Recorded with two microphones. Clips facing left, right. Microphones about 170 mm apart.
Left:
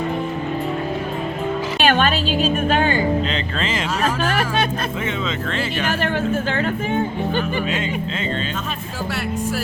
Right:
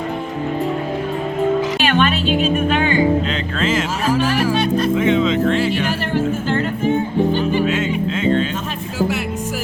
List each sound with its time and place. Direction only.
1.8 s music: 45° left (ahead or behind)
2.6 s speech: 40° left (ahead or behind)
3.6 s music: 5° right (ahead or behind)
4.9 s music: 10° right (ahead or behind)
8.2 s music: 10° right (ahead or behind)